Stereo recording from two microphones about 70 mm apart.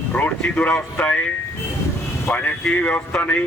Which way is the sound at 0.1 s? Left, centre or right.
Left.